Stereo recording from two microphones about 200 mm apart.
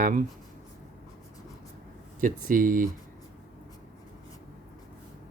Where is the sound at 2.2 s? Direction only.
45° right (ahead or behind).